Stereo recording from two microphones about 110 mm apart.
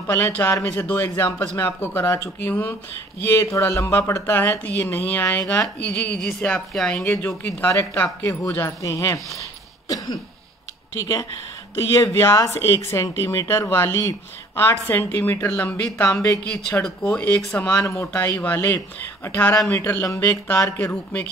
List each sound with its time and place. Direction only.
0.0 s speech: 25° left (ahead or behind)
9.8 s cough: 35° left (ahead or behind)
11.7 s speech: 25° left (ahead or behind)
20.1 s speech: 30° left (ahead or behind)
20.9 s speech: 10° left (ahead or behind)